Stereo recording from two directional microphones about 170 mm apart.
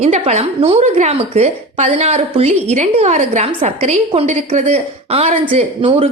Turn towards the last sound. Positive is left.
turn(degrees=-35)  # may be behind; listen again after turning